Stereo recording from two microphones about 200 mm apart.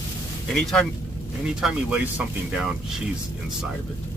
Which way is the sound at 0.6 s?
Centre (ahead or behind).